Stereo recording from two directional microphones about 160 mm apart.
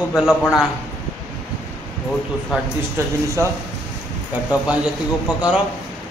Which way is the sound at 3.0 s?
15° right (ahead or behind).